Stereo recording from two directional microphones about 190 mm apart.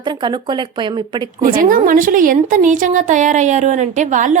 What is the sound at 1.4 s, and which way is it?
A woman's voice, 45° right (ahead or behind).